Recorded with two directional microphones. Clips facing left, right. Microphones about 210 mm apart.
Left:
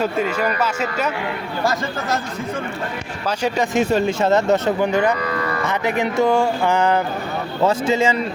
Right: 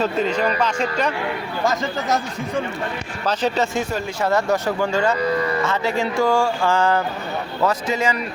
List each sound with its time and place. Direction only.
0.0 s speech: 10° left (ahead or behind)
1.6 s speech: 15° right (ahead or behind)
3.2 s speech: 15° left (ahead or behind)